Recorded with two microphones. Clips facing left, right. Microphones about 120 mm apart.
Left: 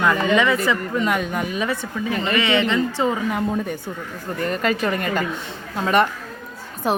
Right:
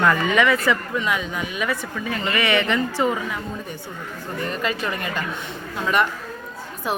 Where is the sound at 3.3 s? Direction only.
55° left (ahead or behind).